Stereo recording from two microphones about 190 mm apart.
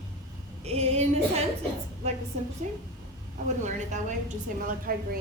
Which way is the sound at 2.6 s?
40° right (ahead or behind).